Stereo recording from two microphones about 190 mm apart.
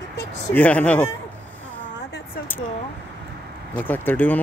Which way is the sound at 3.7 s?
10° left (ahead or behind).